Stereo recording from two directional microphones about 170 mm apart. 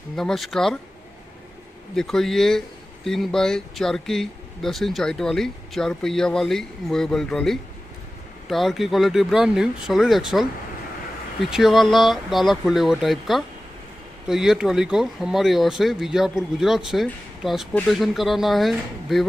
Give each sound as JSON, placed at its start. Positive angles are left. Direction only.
{"t": 0.1, "sound": "speech", "side_deg": 0}
{"t": 2.0, "sound": "speech", "side_deg": 0}
{"t": 11.5, "sound": "speech", "side_deg": 0}